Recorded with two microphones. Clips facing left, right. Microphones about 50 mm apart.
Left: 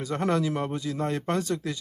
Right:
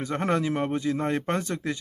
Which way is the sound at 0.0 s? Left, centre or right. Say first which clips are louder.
Even; right.